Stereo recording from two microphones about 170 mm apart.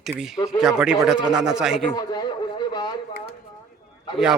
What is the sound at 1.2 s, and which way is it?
Speech, 25° right (ahead or behind).